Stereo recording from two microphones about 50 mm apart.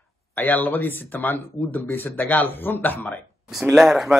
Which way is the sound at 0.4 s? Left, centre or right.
Left.